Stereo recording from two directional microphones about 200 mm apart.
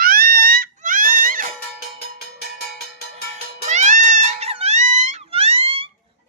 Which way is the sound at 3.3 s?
35° right (ahead or behind).